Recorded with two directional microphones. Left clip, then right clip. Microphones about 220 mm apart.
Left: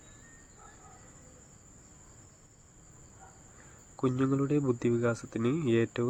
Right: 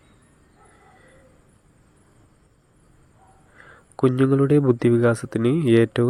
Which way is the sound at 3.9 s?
30° right (ahead or behind).